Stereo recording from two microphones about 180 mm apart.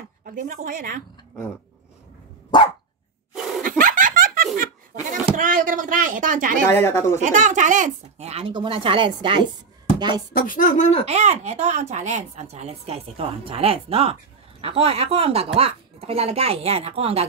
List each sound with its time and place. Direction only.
0.2 s speech: 45° right (ahead or behind)
2.5 s dog: 25° left (ahead or behind)
3.6 s laughter: 50° right (ahead or behind)
5.4 s speech: 45° right (ahead or behind)
6.7 s speech: 15° left (ahead or behind)
7.2 s a woman's voice: 45° right (ahead or behind); by 10.2 s 25° right (ahead or behind)
10.3 s speech: 50° left (ahead or behind)
11.1 s a woman's voice: 35° right (ahead or behind)